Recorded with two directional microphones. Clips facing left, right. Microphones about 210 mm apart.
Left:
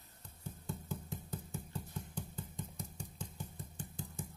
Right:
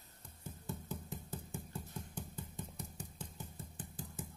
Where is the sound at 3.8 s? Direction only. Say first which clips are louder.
Left 2 dB; 5° right (ahead or behind).